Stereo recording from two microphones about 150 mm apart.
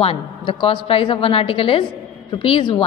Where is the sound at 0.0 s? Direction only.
35° left (ahead or behind).